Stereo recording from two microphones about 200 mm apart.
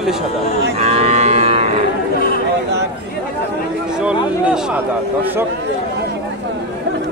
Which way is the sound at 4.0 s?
5° right (ahead or behind).